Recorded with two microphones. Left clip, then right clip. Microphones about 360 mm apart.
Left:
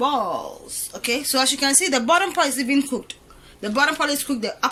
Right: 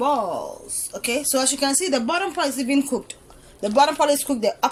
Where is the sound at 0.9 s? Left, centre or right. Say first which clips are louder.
Left 1 dB; centre.